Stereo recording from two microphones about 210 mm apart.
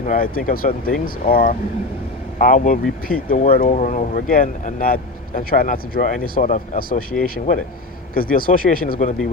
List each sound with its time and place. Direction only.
0.0 s speech: 40° left (ahead or behind)
8.1 s speech: 45° left (ahead or behind)